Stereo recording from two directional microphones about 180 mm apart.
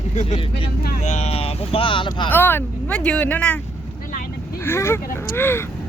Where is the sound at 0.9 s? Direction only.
40° left (ahead or behind).